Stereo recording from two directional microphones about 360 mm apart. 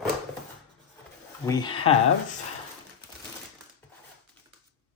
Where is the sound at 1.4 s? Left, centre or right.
Centre.